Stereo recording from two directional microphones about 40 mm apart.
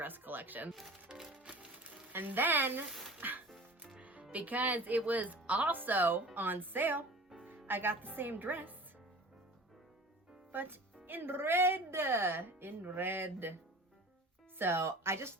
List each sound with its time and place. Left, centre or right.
0.0 s music: right
0.7 s speech: centre
1.1 s music: centre
2.1 s speech: right
3.2 s music: right
3.9 s speech: right
10.5 s speech: right
14.6 s speech: right